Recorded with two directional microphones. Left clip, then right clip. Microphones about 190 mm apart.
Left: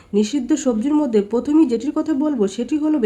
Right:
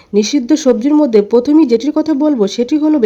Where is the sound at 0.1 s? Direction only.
30° right (ahead or behind).